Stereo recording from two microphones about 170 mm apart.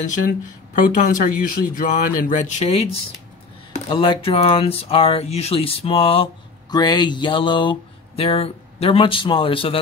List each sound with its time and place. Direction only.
0.7 s speech: 50° left (ahead or behind); by 9.8 s 30° left (ahead or behind)